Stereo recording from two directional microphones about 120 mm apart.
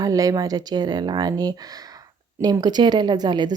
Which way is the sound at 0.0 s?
30° right (ahead or behind).